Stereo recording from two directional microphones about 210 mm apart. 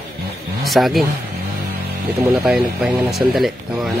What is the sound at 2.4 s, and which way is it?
Speech, centre (ahead or behind).